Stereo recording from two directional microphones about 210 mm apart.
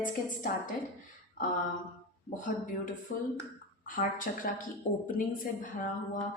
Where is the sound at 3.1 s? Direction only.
45° left (ahead or behind).